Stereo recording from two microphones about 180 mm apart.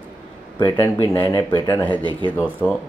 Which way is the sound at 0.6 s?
20° left (ahead or behind).